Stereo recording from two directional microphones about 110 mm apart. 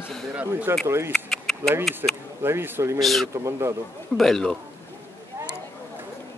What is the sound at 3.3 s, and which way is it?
Speech, 25° right (ahead or behind).